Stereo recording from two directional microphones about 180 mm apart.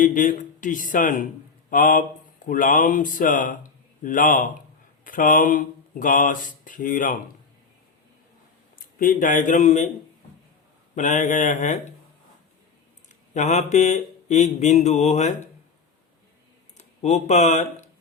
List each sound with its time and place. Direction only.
0.0 s speech: 45° left (ahead or behind)
9.0 s speech: 50° left (ahead or behind)
10.9 s speech: 45° left (ahead or behind)
13.3 s mantra: 40° left (ahead or behind)
16.7 s speech: 40° left (ahead or behind)